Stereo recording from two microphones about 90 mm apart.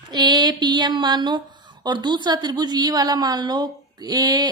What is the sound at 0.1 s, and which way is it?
A woman's voice, 50° right (ahead or behind).